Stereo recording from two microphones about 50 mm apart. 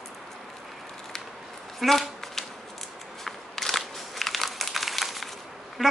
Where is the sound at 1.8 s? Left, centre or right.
Centre.